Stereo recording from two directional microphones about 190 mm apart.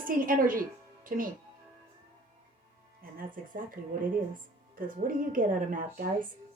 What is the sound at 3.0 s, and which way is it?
Speech, 50° right (ahead or behind).